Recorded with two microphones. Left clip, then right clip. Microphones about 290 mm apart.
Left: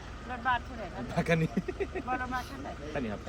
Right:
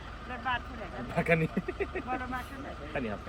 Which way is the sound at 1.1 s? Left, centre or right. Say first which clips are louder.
Right 2 dB; centre.